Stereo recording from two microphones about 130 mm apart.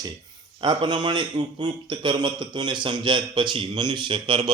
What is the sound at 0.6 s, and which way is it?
A man's voice, 35° right (ahead or behind).